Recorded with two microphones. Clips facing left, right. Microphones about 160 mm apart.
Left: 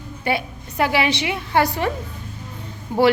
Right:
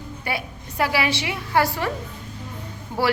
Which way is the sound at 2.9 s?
15° left (ahead or behind).